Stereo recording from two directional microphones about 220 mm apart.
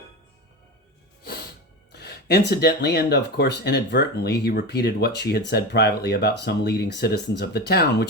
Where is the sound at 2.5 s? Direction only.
45° left (ahead or behind).